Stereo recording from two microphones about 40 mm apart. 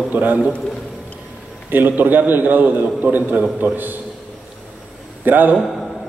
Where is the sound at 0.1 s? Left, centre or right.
Right.